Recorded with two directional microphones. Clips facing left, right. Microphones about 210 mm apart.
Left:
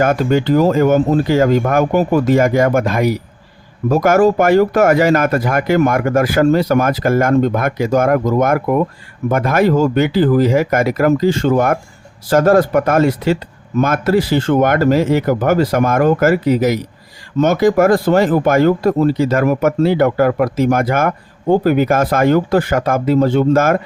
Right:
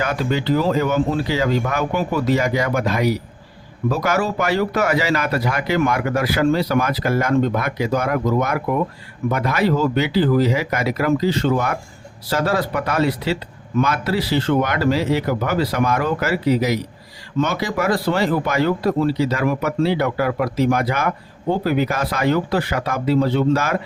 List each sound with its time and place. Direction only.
0.0 s speech: 50° left (ahead or behind)